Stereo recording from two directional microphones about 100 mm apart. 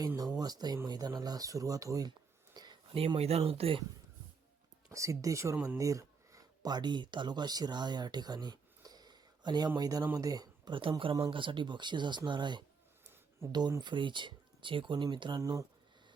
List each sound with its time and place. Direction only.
0.2 s speech: 40° right (ahead or behind)
2.5 s a sound: 40° right (ahead or behind)
3.2 s speech: 90° right; by 3.8 s 70° right (ahead or behind)
4.9 s speech: 30° right (ahead or behind)
11.0 s speech: 55° right (ahead or behind)
15.4 s speech: 35° right (ahead or behind)